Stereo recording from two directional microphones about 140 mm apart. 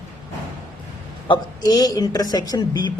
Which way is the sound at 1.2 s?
35° left (ahead or behind).